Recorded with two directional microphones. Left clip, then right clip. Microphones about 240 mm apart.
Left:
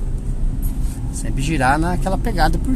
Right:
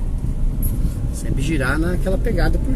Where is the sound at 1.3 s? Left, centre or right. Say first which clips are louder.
Left 5 dB; left.